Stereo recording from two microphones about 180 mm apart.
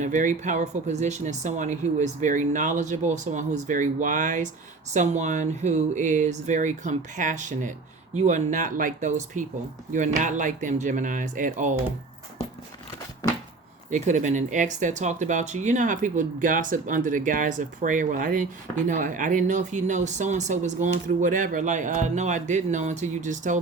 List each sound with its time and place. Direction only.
0.0 s speech: 45° right (ahead or behind)
13.9 s speech: 40° right (ahead or behind)